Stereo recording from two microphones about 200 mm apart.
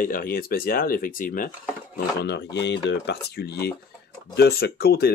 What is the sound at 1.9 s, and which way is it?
Speech, 55° left (ahead or behind).